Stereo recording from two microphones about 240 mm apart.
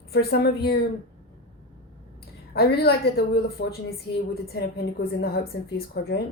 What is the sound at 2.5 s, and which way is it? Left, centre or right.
Speech, left.